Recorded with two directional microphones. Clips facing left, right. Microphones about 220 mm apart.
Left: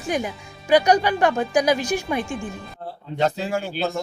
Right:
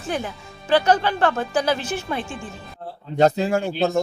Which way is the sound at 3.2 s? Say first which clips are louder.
Right 5 dB; 40° right (ahead or behind).